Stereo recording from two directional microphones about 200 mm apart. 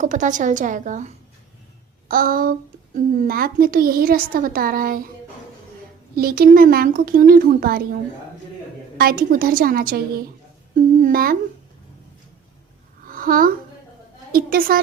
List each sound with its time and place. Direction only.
0.0 s a woman's voice: 40° right (ahead or behind)
6.1 s a child's voice: 50° right (ahead or behind)
9.0 s a child's voice: 50° right (ahead or behind)
13.1 s a sound: 45° right (ahead or behind)
14.3 s a child's voice: 45° right (ahead or behind)